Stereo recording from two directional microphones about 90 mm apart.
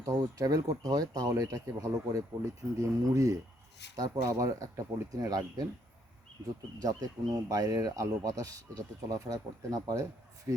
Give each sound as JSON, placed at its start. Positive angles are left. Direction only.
{"t": 0.0, "sound": "speech", "side_deg": -40}
{"t": 6.8, "sound": "speech", "side_deg": -40}